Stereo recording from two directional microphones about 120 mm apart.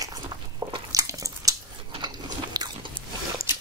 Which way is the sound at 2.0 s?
35° right (ahead or behind).